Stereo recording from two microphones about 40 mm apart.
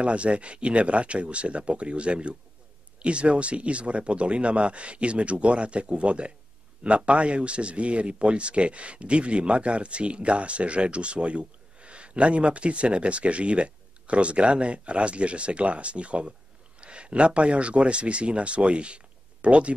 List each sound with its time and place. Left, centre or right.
0.0 s speech: right